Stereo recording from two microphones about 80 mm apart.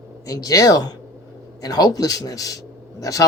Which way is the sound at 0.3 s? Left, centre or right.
Left.